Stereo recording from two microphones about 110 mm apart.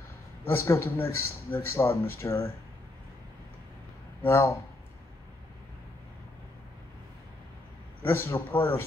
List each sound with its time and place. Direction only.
0.5 s speech: 20° left (ahead or behind)
4.2 s speech: 20° left (ahead or behind)
8.0 s speech: 20° left (ahead or behind)